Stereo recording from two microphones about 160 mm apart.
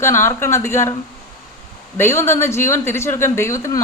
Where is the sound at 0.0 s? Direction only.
15° left (ahead or behind).